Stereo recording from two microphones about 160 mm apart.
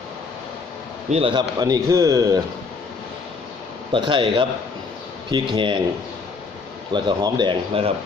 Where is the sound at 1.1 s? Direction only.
35° right (ahead or behind).